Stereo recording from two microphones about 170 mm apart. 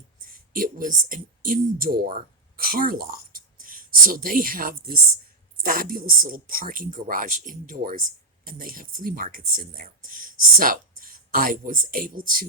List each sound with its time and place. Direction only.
0.5 s speech: 55° right (ahead or behind)